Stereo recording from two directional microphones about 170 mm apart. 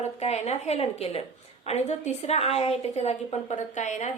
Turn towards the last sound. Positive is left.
turn(degrees=45)  # may be behind; listen again after turning